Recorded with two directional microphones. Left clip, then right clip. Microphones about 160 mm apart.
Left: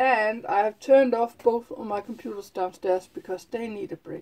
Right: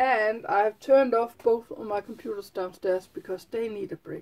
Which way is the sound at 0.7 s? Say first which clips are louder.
Left 3 dB; 10° right (ahead or behind).